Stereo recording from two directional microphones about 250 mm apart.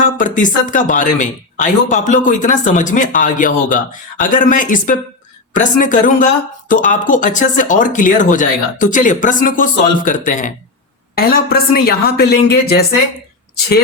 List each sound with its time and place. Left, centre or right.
0.2 s speech: left